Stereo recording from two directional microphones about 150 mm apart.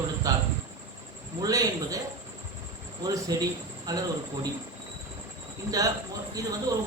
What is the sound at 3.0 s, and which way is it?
A woman's voice, 25° right (ahead or behind).